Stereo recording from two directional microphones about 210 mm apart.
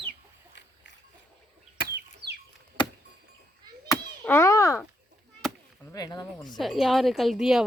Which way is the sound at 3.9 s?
10° left (ahead or behind).